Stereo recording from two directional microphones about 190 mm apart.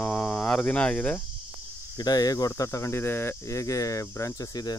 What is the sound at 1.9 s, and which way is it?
Speech, 20° left (ahead or behind).